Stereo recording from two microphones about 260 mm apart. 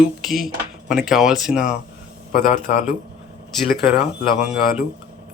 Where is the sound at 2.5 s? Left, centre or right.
Left.